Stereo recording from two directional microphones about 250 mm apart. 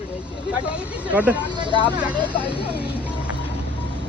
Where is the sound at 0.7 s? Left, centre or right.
Centre.